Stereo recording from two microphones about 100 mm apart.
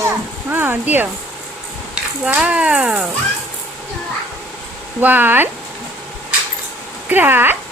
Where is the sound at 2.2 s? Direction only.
15° right (ahead or behind).